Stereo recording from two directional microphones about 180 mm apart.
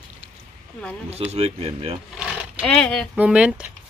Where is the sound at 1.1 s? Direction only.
35° right (ahead or behind).